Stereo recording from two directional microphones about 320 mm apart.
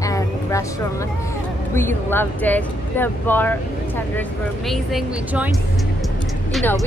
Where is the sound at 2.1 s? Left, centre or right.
Centre.